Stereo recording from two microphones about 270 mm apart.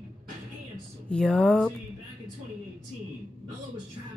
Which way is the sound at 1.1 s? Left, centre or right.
Centre.